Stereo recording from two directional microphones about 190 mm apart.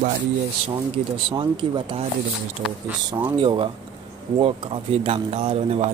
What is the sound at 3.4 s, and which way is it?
Speech, 25° right (ahead or behind).